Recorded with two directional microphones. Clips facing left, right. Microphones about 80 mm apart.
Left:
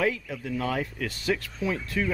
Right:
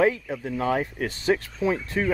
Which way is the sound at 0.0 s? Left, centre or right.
Right.